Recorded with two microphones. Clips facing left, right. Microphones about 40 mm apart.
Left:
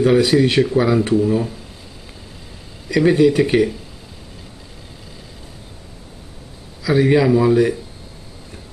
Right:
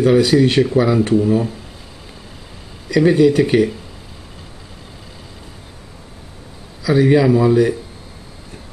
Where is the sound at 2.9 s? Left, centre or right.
Centre.